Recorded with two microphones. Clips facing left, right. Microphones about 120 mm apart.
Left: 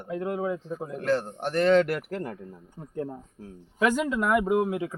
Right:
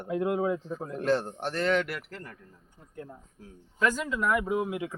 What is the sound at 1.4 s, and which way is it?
Speech, 20° left (ahead or behind).